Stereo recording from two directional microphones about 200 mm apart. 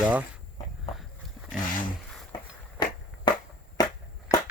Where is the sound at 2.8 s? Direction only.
20° left (ahead or behind).